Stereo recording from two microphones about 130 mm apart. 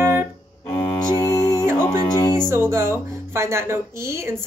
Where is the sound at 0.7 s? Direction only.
25° left (ahead or behind).